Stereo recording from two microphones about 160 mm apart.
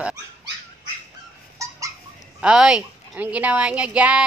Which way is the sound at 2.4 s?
5° right (ahead or behind).